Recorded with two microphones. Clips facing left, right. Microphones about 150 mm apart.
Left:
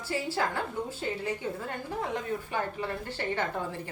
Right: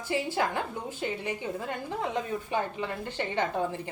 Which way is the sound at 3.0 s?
20° right (ahead or behind).